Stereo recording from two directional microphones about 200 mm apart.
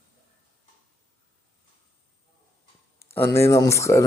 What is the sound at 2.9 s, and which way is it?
Speech, 15° left (ahead or behind).